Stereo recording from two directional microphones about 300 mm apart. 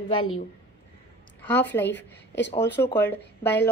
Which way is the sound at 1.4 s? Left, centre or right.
Centre.